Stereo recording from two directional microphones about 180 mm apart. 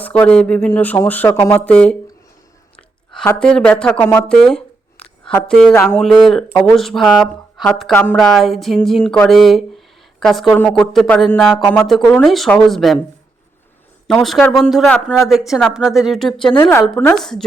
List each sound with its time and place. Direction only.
0.0 s speech: 5° left (ahead or behind)
4.4 s a sound: 5° left (ahead or behind)
5.5 s speech: 5° left (ahead or behind)
6.5 s speech: 20° left (ahead or behind)
6.7 s speech: centre (ahead or behind)
14.1 s speech: centre (ahead or behind)
16.6 s speech: 15° left (ahead or behind)